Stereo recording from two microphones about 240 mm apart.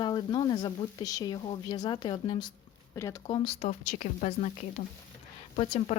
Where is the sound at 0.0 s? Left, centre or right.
Centre.